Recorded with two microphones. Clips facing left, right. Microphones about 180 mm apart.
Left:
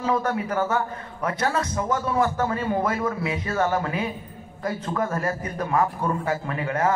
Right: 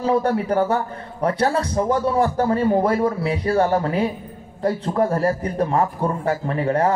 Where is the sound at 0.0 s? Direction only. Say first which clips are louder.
Right 5 dB; 30° right (ahead or behind).